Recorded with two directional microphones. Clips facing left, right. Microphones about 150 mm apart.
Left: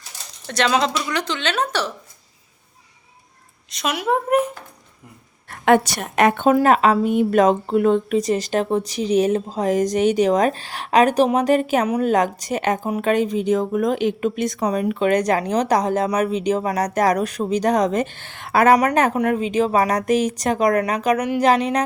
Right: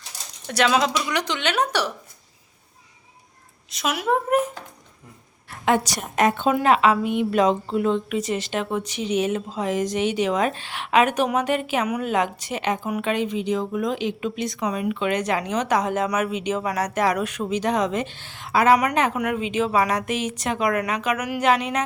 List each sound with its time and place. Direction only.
0.4 s a woman's voice: 10° right (ahead or behind)
3.7 s speech: 5° right (ahead or behind)
5.5 s a woman's voice: 60° left (ahead or behind)
8.1 s a woman's voice: 40° left (ahead or behind)
18.8 s speech: 40° left (ahead or behind)